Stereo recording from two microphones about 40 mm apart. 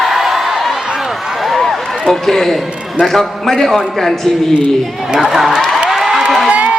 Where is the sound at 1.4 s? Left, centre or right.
Centre.